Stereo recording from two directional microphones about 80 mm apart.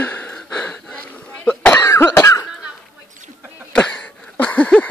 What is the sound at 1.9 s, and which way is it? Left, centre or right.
Cough, left.